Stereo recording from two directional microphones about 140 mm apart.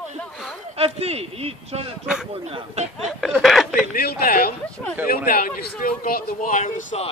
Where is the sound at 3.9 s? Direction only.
90° left; by 6.9 s 65° left (ahead or behind).